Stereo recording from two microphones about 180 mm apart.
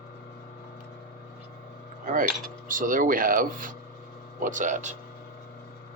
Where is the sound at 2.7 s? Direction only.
50° right (ahead or behind).